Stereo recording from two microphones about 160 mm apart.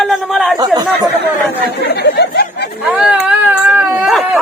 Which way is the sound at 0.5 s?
25° right (ahead or behind).